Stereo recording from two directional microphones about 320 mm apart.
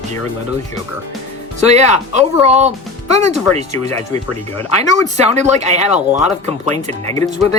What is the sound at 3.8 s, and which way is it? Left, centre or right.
Speech, centre.